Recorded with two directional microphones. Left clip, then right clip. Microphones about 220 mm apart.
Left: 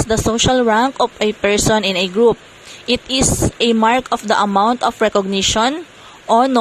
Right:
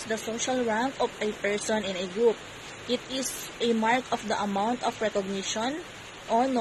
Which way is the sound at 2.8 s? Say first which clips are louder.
Left 14 dB; 35° left (ahead or behind).